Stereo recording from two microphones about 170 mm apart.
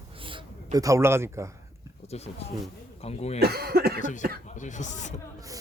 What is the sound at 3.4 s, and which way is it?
Speech, 65° right (ahead or behind).